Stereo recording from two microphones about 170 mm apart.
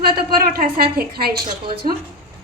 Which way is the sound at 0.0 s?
65° right (ahead or behind).